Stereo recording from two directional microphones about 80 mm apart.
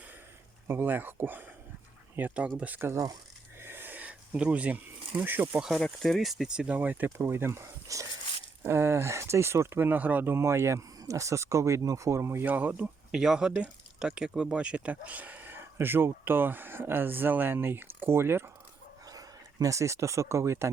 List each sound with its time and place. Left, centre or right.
0.7 s speech: right
2.8 s speech: right
3.6 s a sound: right
5.6 s speech: centre
6.7 s speech: right
19.0 s speech: right